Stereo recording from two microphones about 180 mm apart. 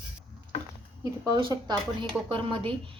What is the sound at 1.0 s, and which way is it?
A woman's voice, 20° right (ahead or behind).